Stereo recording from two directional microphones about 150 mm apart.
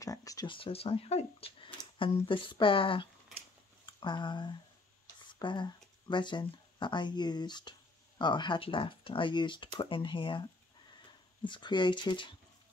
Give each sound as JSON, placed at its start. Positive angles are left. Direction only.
{"t": 0.0, "sound": "a sound", "side_deg": 20}
{"t": 0.6, "sound": "speech", "side_deg": 40}
{"t": 11.4, "sound": "speech", "side_deg": 30}